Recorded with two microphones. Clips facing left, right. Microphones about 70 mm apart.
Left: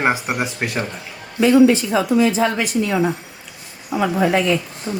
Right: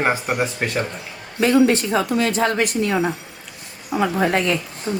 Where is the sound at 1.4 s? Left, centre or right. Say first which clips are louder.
Left 3 dB; right.